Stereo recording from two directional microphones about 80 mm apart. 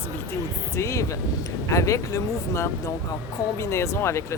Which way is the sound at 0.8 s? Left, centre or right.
Left.